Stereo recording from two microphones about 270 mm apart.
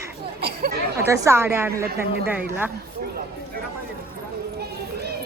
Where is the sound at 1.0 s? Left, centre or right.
Centre.